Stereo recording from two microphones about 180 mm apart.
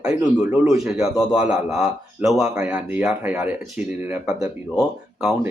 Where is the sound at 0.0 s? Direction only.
5° right (ahead or behind).